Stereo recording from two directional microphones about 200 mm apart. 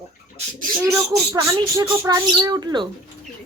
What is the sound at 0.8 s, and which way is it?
Speech, 15° right (ahead or behind).